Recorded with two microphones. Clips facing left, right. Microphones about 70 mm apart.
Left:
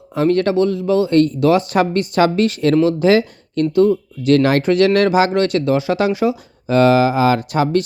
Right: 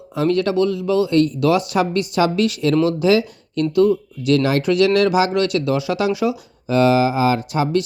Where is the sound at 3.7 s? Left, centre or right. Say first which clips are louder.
Left 1 dB; left.